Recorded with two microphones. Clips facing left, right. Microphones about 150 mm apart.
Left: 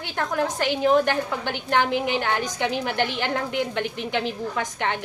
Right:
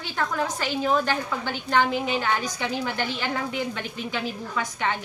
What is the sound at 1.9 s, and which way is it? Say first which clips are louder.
A woman's voice: left 2 dB; 65° left (ahead or behind).